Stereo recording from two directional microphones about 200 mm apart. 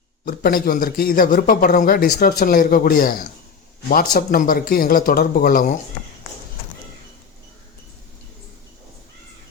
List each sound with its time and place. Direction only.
0.3 s speech: 45° left (ahead or behind)